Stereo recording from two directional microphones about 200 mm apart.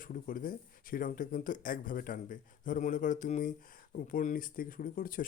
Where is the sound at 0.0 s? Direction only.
45° left (ahead or behind).